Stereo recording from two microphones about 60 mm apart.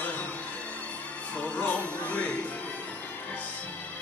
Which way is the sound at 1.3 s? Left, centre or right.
Left.